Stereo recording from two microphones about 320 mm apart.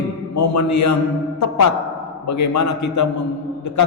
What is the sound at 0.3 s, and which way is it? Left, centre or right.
Speech, left.